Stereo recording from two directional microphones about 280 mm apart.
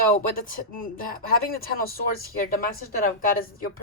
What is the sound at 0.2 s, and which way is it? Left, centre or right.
A woman's voice, left.